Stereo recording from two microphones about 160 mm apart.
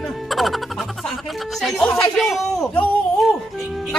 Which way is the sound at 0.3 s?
Centre (ahead or behind).